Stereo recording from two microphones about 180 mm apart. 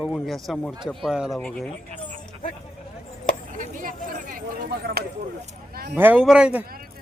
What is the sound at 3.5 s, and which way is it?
Chop, 45° right (ahead or behind).